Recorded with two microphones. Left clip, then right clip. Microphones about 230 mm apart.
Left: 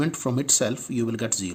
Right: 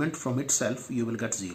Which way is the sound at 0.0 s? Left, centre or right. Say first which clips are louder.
Left 4 dB; left.